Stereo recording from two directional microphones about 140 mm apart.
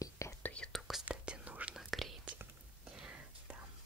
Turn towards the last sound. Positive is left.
turn(degrees=-5)  # may be behind; listen again after turning